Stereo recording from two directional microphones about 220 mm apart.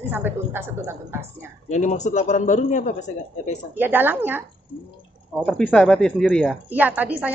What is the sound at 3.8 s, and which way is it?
Speech, 10° right (ahead or behind).